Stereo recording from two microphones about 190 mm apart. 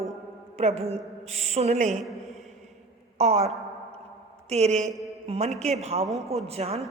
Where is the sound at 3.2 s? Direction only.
35° right (ahead or behind).